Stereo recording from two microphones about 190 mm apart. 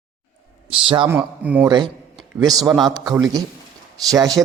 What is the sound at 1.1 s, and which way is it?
Speech, 10° right (ahead or behind).